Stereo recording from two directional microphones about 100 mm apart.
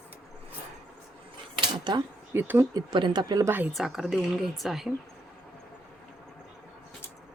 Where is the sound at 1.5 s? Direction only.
45° right (ahead or behind).